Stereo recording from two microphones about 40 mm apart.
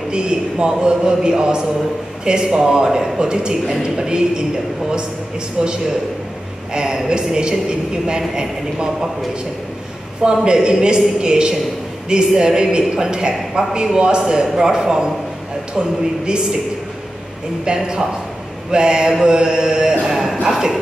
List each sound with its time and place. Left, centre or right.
0.1 s a man's voice: right
5.6 s a man's voice: centre
10.2 s a man's voice: right
17.6 s a man's voice: centre
20.1 s a sound: centre